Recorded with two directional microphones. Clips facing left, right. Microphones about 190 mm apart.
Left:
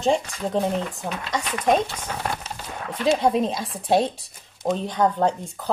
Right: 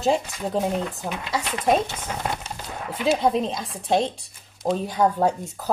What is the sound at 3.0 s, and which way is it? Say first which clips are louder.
A woman's voice: left 1 dB; 5° right (ahead or behind).